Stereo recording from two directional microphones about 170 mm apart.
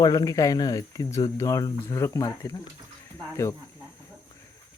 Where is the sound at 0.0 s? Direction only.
20° left (ahead or behind).